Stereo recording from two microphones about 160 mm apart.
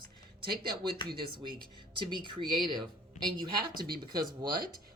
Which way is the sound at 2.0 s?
30° right (ahead or behind).